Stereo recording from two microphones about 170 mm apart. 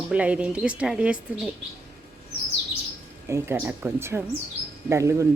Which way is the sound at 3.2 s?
15° right (ahead or behind).